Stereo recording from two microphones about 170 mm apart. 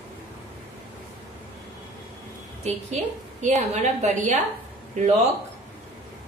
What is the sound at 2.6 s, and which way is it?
A woman's voice, 40° right (ahead or behind).